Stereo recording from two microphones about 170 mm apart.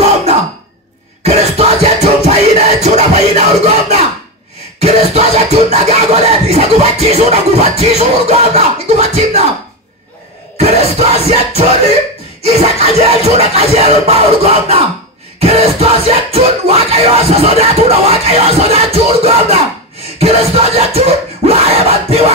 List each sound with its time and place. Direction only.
1.2 s music: 40° right (ahead or behind)
4.7 s scratching: 40° right (ahead or behind)
10.6 s music: 35° right (ahead or behind)